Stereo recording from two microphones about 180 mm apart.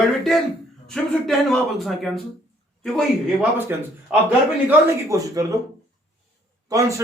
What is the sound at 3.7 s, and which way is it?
Speech, 10° right (ahead or behind).